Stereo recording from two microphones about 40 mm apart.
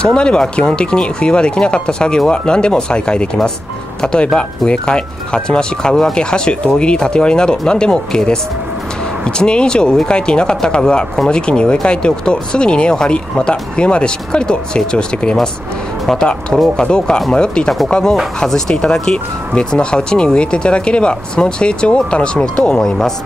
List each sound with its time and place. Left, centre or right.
0.0 s speech: left
9.2 s speech: left
22.6 s speech: centre